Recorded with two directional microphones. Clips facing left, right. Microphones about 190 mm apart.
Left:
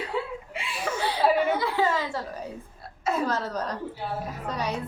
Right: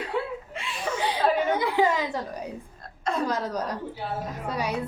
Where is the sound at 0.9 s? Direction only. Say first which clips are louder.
Left 1 dB; 10° right (ahead or behind).